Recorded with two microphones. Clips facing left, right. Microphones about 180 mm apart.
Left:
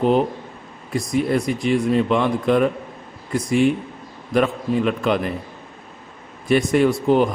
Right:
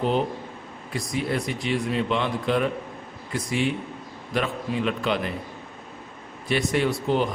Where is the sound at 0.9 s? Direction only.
45° left (ahead or behind).